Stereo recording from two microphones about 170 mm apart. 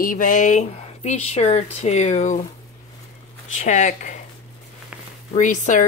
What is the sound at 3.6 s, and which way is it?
Speech, 45° left (ahead or behind).